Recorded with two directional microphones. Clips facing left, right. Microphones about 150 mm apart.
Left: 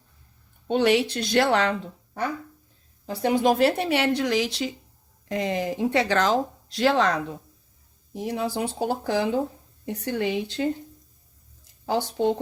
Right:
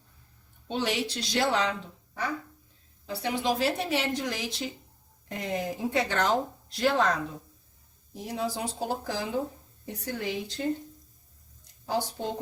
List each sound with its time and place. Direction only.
0.7 s a woman's voice: 65° left (ahead or behind)
3.1 s a woman's voice: 45° left (ahead or behind); by 7.2 s 85° left
8.1 s speech: 65° left (ahead or behind)
11.9 s speech: 70° left (ahead or behind)